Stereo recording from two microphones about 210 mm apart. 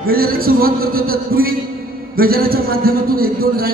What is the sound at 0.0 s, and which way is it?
Speech, 45° right (ahead or behind).